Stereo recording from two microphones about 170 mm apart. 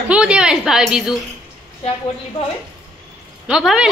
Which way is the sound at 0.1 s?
5° right (ahead or behind).